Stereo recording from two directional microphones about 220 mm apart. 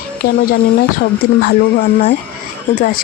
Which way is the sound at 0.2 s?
40° left (ahead or behind).